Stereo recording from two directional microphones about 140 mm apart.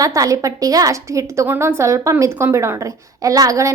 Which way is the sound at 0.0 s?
25° right (ahead or behind).